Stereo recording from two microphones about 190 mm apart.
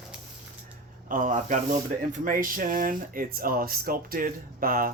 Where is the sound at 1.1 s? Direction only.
45° right (ahead or behind).